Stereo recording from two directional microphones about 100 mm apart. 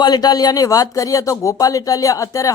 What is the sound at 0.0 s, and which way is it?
Speech, 45° left (ahead or behind).